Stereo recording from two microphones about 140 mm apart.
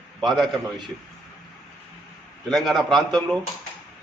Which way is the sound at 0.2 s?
Centre (ahead or behind).